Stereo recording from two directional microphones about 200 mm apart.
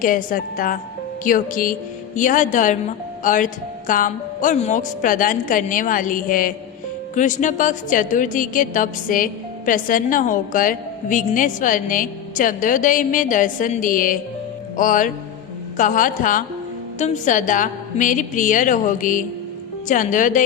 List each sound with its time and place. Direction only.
0.0 s a woman's voice: 45° left (ahead or behind)